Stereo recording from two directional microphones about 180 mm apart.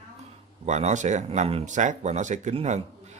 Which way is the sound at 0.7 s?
40° right (ahead or behind).